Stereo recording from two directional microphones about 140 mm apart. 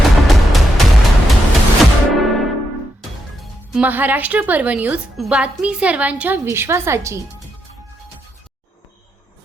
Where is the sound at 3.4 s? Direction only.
10° right (ahead or behind).